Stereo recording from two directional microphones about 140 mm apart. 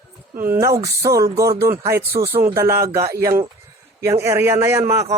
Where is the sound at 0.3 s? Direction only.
15° right (ahead or behind).